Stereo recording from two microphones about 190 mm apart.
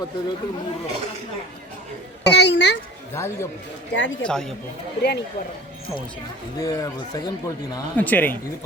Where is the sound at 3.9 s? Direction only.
70° left (ahead or behind).